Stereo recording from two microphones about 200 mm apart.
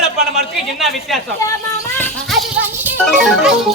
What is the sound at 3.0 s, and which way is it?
Speech, centre (ahead or behind).